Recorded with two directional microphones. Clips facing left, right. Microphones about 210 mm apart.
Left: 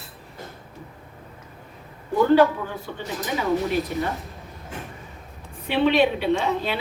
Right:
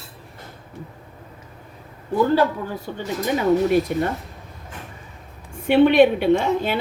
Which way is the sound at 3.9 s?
55° right (ahead or behind).